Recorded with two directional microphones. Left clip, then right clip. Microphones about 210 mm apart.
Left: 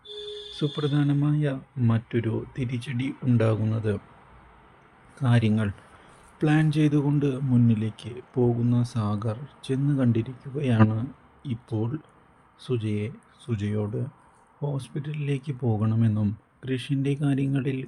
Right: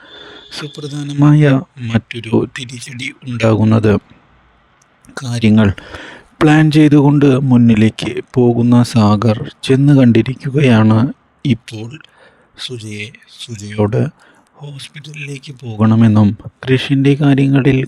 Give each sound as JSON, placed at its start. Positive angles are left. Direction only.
{"t": 0.8, "sound": "a man's voice", "side_deg": 0}
{"t": 1.2, "sound": "speech", "side_deg": -50}
{"t": 5.4, "sound": "speech", "side_deg": -50}